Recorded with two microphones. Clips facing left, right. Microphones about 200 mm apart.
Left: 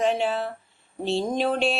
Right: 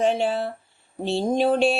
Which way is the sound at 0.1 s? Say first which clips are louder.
Right 2 dB; 30° right (ahead or behind).